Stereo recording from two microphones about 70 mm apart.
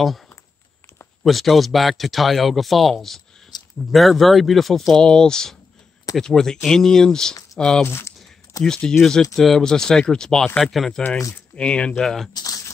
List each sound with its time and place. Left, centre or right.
1.2 s speech: centre
3.5 s a sound: left
3.9 s speech: centre
7.8 s speech: left
8.6 s speech: centre
11.5 s speech: centre
12.4 s a sound: left